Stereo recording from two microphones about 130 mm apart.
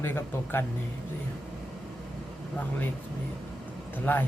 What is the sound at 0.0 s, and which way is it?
Speech, 20° left (ahead or behind).